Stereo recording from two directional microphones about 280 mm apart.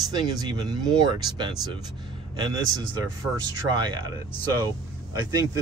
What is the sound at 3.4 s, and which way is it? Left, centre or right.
Speech, centre.